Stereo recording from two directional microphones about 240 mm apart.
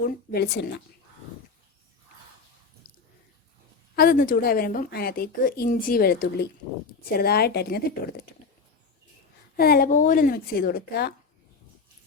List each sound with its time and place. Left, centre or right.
0.0 s a woman's voice: left
3.9 s a woman's voice: left
9.6 s a woman's voice: left